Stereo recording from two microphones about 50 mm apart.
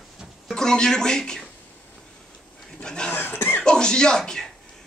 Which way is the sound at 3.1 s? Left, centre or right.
Left.